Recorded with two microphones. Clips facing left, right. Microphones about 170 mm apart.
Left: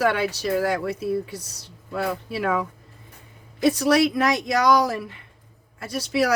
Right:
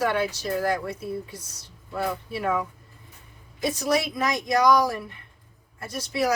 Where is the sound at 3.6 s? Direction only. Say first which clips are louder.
Left 6 dB; 70° left (ahead or behind).